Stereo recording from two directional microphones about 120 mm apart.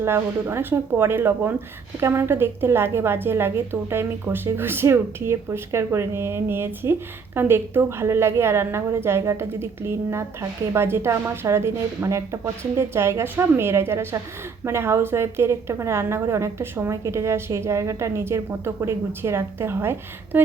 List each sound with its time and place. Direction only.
0.0 s speech: 20° right (ahead or behind)